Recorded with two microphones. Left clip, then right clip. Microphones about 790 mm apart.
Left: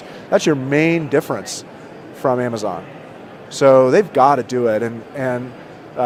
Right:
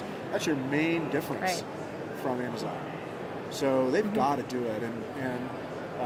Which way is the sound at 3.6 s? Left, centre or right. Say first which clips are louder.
Left 16 dB; left.